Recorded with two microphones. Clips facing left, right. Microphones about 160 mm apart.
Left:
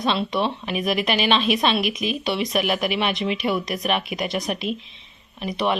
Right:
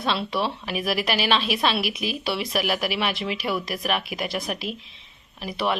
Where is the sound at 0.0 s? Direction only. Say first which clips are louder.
Left 3 dB; 5° right (ahead or behind).